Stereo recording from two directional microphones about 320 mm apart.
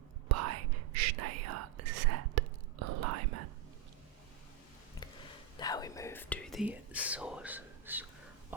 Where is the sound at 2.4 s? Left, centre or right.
Right.